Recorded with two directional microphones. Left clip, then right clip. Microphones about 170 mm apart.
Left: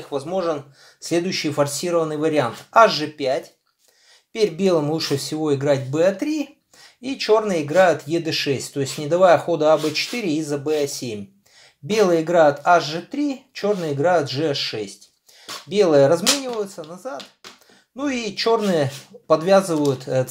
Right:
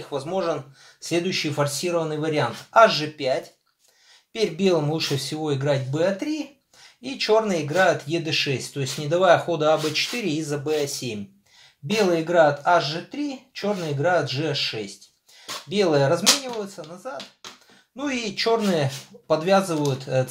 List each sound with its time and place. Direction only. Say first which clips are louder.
0.1 s speech: left 2 dB; 35° left (ahead or behind)
7.0 s speech: left 2 dB; 30° left (ahead or behind)
11.9 s speech: left 4 dB; 35° left (ahead or behind)